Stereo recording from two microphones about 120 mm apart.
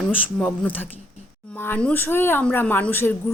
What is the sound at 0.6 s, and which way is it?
A woman's voice, 15° left (ahead or behind).